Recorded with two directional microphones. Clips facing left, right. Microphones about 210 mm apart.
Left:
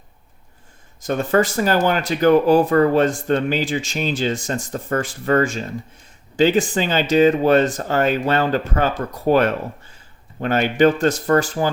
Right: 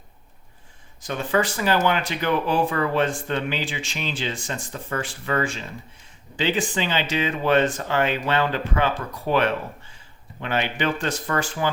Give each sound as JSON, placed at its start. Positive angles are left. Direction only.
{"t": 1.0, "sound": "speech", "side_deg": 45}